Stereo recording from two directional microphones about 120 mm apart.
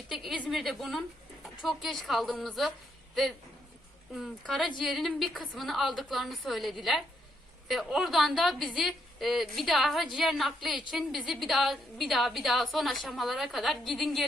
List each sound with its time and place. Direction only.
0.5 s a woman's voice: centre (ahead or behind)
4.1 s a woman's voice: centre (ahead or behind)